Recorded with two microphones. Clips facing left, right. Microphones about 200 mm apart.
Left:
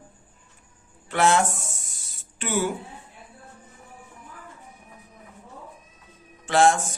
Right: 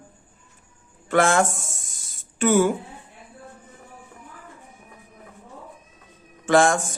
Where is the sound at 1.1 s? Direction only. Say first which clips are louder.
Right 2 dB; 50° right (ahead or behind).